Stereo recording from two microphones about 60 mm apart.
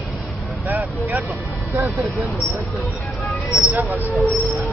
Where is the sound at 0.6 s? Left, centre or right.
Right.